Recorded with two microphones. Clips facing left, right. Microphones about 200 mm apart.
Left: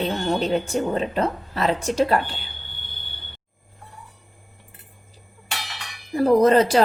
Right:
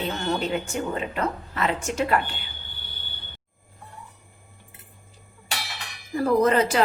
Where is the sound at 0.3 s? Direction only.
35° left (ahead or behind).